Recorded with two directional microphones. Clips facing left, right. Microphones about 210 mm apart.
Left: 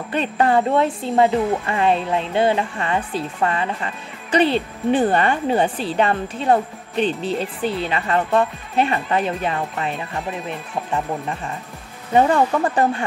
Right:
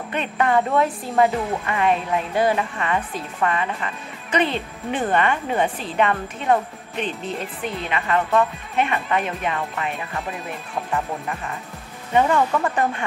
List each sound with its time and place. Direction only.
0.1 s speech: 35° left (ahead or behind)
12.1 s speech: 35° left (ahead or behind)